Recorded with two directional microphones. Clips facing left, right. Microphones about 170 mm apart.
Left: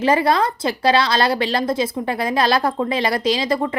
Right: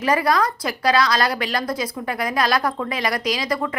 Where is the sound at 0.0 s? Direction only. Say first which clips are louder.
Left 3 dB; 25° left (ahead or behind).